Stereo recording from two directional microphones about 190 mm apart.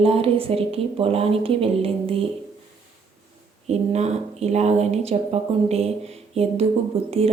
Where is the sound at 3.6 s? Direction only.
35° right (ahead or behind).